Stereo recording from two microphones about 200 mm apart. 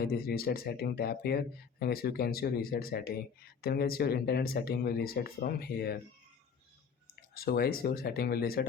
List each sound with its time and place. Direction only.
0.0 s speech: 50° left (ahead or behind)
7.3 s speech: 50° left (ahead or behind)